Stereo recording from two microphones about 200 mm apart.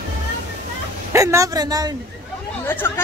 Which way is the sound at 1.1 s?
15° right (ahead or behind).